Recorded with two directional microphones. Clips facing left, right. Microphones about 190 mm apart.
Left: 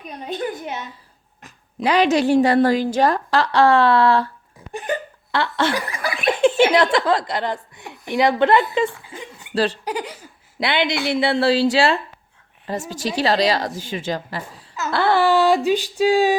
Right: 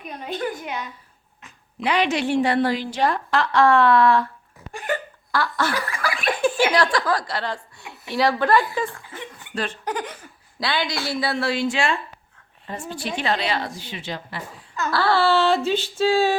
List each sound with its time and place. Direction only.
0.3 s speech: 20° left (ahead or behind)
1.4 s a woman's voice: 40° left (ahead or behind)
4.7 s speech: 20° left (ahead or behind)
8.9 s a sound: 10° left (ahead or behind)
10.6 s a woman's voice: 20° left (ahead or behind); by 14.6 s 40° left (ahead or behind)
14.8 s a sound: 20° left (ahead or behind)